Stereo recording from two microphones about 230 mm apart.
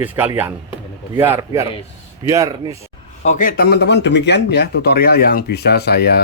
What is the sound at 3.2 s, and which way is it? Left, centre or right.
Speech, left.